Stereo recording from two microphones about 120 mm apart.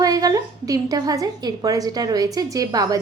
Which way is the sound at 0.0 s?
30° right (ahead or behind).